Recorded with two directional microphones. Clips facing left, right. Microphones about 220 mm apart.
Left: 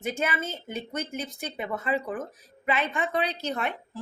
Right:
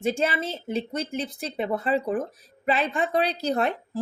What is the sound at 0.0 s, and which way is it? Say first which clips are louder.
Speech: right 5 dB; 30° right (ahead or behind).